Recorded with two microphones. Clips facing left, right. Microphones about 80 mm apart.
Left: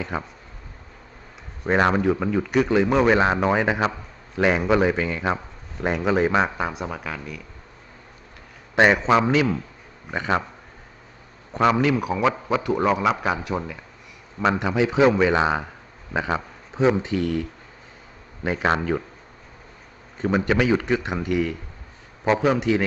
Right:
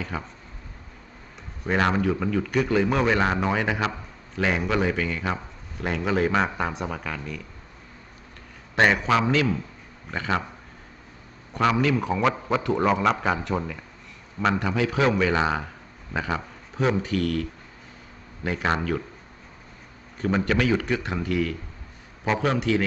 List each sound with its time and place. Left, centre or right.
0.0 s speech: centre
1.6 s speech: left
8.7 s speech: centre
11.6 s a man's voice: centre
18.4 s speech: centre
20.1 s speech: centre